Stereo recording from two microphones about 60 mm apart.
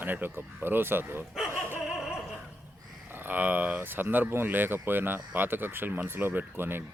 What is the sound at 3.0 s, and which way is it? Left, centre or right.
Speech, right.